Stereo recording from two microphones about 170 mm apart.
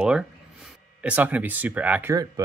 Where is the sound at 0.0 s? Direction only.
5° right (ahead or behind).